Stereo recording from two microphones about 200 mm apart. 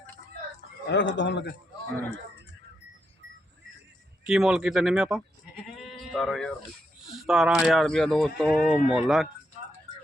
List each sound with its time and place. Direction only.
0.9 s speech: 65° left (ahead or behind)
4.3 s speech: centre (ahead or behind)
5.7 s sheep: centre (ahead or behind)
7.3 s speech: 5° right (ahead or behind)